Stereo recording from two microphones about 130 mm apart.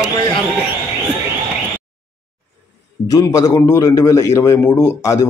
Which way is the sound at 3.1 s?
30° left (ahead or behind).